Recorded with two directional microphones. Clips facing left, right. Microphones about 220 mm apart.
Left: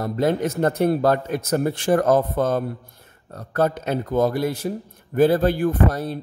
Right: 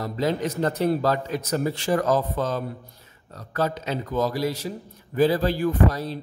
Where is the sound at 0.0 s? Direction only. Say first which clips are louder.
Left 4 dB; 55° left (ahead or behind).